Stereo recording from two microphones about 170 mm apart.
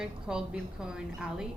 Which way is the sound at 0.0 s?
5° right (ahead or behind).